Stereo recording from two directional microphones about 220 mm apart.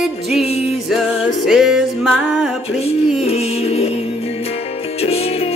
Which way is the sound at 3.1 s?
30° left (ahead or behind).